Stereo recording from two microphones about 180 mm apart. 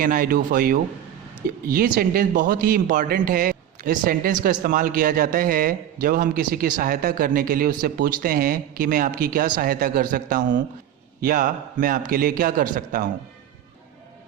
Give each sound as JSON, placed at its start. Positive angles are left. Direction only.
{"t": 0.0, "sound": "a man's voice", "side_deg": -50}